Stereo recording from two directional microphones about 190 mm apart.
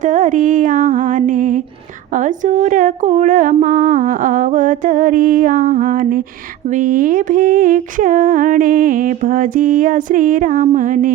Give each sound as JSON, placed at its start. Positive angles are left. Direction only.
{"t": 0.0, "sound": "music", "side_deg": -40}
{"t": 2.1, "sound": "mantra", "side_deg": -40}